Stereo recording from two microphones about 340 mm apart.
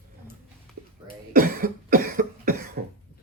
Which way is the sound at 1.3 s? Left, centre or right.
Right.